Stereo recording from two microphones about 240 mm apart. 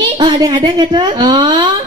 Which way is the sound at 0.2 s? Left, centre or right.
Centre.